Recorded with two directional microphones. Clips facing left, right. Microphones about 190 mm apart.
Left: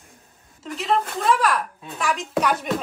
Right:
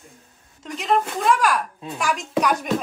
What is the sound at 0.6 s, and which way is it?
Speech, centre (ahead or behind).